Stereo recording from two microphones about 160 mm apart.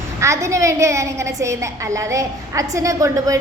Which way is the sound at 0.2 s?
20° right (ahead or behind).